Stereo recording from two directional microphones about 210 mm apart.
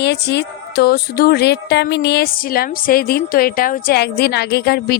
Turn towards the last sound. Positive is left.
turn(degrees=50)  # may be behind; listen again after turning